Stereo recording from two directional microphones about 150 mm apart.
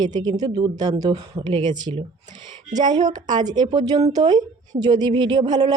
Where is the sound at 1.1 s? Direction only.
40° right (ahead or behind).